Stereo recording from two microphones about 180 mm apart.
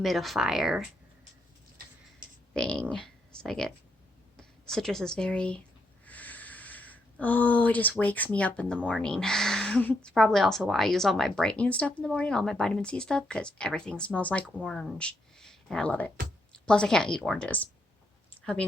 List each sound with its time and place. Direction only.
0.0 s speech: centre (ahead or behind)
2.5 s speech: 5° left (ahead or behind)
6.1 s a sound: 10° left (ahead or behind)
8.9 s speech: 5° left (ahead or behind)